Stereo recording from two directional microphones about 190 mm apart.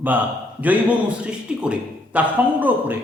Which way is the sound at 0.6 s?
10° right (ahead or behind).